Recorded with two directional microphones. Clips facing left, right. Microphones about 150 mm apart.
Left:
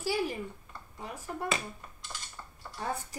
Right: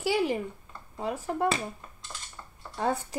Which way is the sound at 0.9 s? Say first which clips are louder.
Right 9 dB; 75° right (ahead or behind).